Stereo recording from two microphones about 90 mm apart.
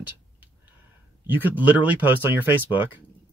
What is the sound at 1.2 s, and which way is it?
Speech, 20° right (ahead or behind).